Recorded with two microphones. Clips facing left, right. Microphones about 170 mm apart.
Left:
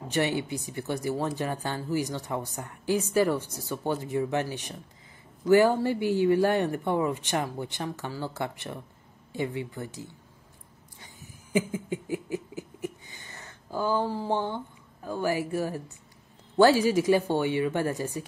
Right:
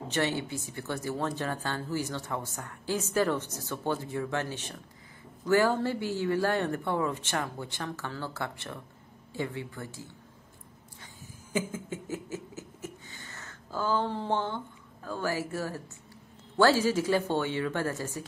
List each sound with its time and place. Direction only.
0.1 s a woman's voice: 15° left (ahead or behind)
11.5 s a sound: 15° left (ahead or behind)
15.0 s a woman's voice: 15° left (ahead or behind)